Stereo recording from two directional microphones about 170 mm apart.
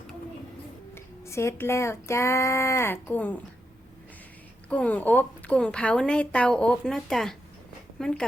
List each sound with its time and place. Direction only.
0.9 s speech: 15° left (ahead or behind)
4.7 s speech: 10° left (ahead or behind)